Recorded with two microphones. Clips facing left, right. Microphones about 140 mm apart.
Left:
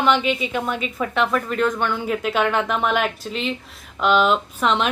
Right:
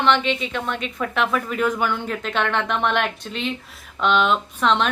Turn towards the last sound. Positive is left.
turn(degrees=5)  # may be behind; listen again after turning